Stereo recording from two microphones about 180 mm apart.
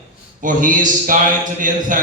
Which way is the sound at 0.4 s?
45° right (ahead or behind).